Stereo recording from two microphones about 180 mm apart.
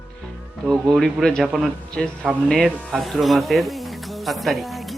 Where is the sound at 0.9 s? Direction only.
5° left (ahead or behind).